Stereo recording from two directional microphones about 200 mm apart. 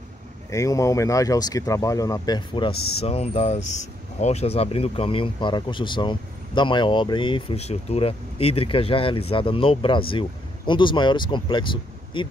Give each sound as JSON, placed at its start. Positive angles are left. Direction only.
{"t": 0.5, "sound": "speech", "side_deg": 15}